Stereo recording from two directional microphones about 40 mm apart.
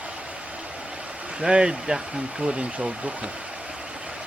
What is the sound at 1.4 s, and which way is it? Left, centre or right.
Speech, right.